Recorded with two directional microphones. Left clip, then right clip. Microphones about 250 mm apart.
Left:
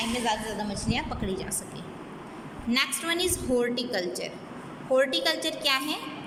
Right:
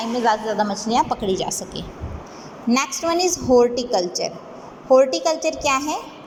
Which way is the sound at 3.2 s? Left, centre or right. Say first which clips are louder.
Right 8 dB; left.